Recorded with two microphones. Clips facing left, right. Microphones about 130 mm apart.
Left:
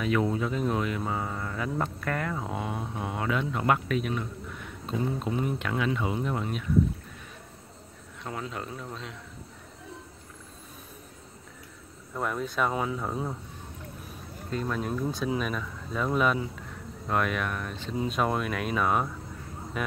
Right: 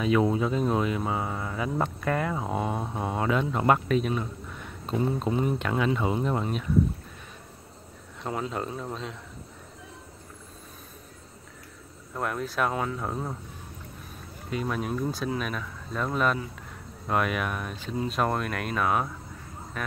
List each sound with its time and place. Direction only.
0.0 s speech: 20° right (ahead or behind)
8.2 s speech: 30° right (ahead or behind)
12.1 s speech: centre (ahead or behind)
14.5 s speech: 10° right (ahead or behind)
18.0 s speech: centre (ahead or behind)